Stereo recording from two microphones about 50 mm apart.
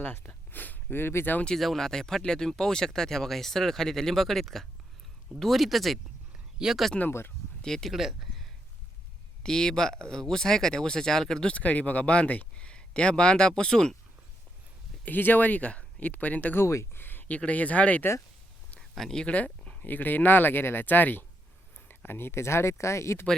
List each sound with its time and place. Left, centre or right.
0.3 s speech: left
1.5 s speech: centre
7.6 s speech: centre
7.9 s speech: centre
9.4 s speech: centre
11.5 s speech: left
15.0 s speech: left
16.6 s speech: left
17.0 s speech: left
18.8 s a sound: centre
19.2 s speech: left
19.9 s speech: left